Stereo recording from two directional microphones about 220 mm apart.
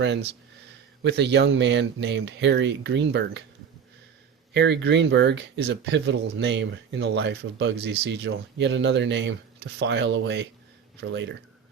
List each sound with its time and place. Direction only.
1.0 s speech: 50° right (ahead or behind)
4.5 s speech: 50° right (ahead or behind)